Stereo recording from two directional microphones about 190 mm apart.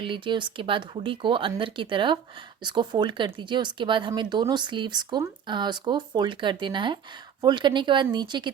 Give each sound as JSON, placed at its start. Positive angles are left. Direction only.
{"t": 0.0, "sound": "speech", "side_deg": -25}